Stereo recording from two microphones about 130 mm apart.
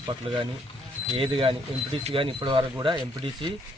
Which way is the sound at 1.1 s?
40° right (ahead or behind).